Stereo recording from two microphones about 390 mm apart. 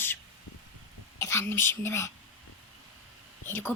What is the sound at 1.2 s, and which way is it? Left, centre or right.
Speech, centre.